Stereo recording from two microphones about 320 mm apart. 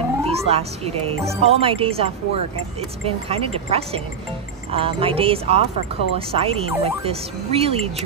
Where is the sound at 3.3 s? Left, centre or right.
Centre.